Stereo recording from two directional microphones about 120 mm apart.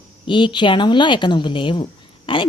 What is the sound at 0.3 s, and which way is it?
Speech, 40° left (ahead or behind).